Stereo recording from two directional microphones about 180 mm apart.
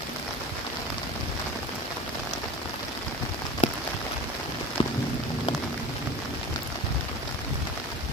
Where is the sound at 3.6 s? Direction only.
40° left (ahead or behind).